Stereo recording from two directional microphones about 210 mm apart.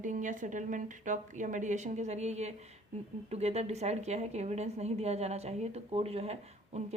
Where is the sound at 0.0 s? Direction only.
35° right (ahead or behind).